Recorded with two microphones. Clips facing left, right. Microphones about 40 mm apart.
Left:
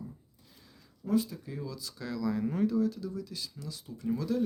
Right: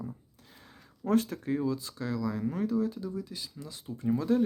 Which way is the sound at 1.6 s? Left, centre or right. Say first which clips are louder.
Right 8 dB; right.